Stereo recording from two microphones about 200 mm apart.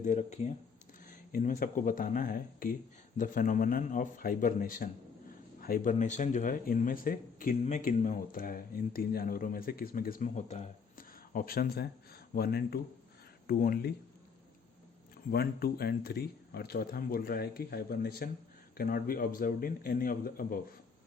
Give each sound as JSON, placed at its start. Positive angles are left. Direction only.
{"t": 0.0, "sound": "speech", "side_deg": 35}
{"t": 15.3, "sound": "speech", "side_deg": 50}